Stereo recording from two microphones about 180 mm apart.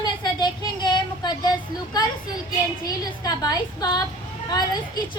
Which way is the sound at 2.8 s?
20° left (ahead or behind).